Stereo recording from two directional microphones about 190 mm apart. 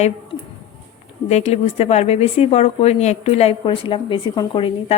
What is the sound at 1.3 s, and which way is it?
Speech, 35° left (ahead or behind).